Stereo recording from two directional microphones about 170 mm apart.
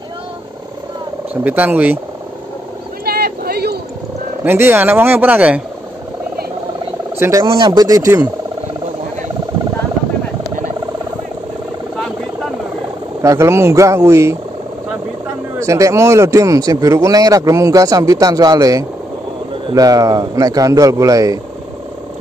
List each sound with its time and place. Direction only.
1.3 s speech: 10° right (ahead or behind)
3.1 s a sound: 65° right (ahead or behind)
4.5 s speech: 15° right (ahead or behind)
7.2 s speech: 15° right (ahead or behind)
13.2 s speech: 15° right (ahead or behind)
15.6 s speech: 20° right (ahead or behind)